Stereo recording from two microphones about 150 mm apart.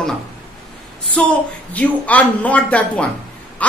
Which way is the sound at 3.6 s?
10° left (ahead or behind).